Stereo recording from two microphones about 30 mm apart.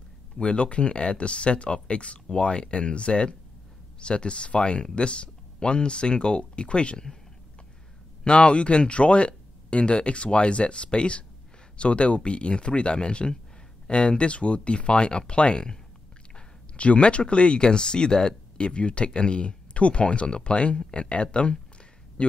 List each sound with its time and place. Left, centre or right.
0.4 s speech: left
8.2 s speech: left
16.7 s speech: left
18.7 s speech: left